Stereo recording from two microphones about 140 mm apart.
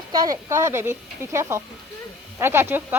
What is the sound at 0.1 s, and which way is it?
A woman's voice, 25° right (ahead or behind).